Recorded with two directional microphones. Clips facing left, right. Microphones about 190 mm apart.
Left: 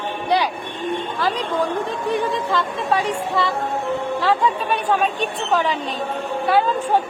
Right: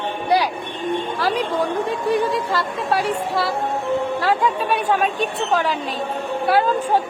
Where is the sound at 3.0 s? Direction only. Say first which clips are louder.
Even; 5° right (ahead or behind).